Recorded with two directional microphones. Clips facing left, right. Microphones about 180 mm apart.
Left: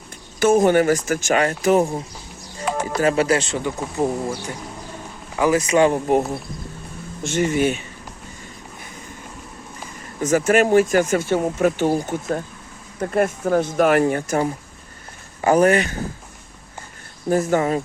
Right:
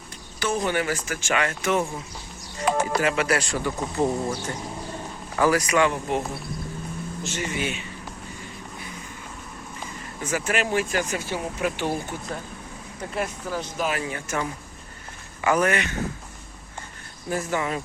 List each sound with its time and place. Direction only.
0.3 s speech: 45° left (ahead or behind); by 3.8 s 20° left (ahead or behind)
4.0 s speech: 10° left (ahead or behind)
5.4 s speech: 25° left (ahead or behind); by 6.2 s 45° left (ahead or behind)
7.3 s speech: 50° left (ahead or behind)
10.2 s speech: 45° left (ahead or behind)
17.2 s speech: 40° left (ahead or behind)